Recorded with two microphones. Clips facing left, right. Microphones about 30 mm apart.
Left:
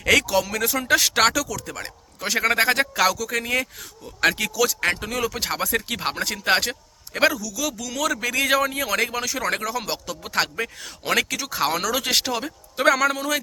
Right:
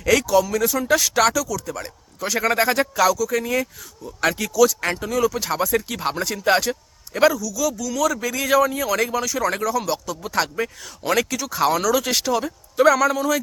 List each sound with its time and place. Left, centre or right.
0.0 s speech: left
4.0 s speech: left